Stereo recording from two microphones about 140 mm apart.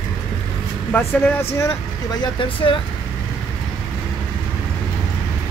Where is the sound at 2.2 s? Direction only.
35° left (ahead or behind).